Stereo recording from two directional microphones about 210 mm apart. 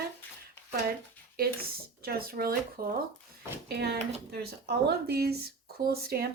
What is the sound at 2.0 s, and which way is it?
Speech, 45° right (ahead or behind).